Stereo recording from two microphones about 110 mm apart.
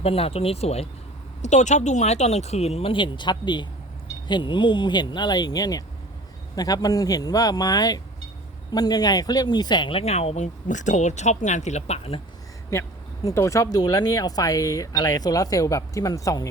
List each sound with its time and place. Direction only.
0.0 s speech: 60° left (ahead or behind)
1.4 s speech: 90° left; by 10.0 s 45° left (ahead or behind)
10.0 s speech: 75° left (ahead or behind)
12.7 s speech: 25° left (ahead or behind)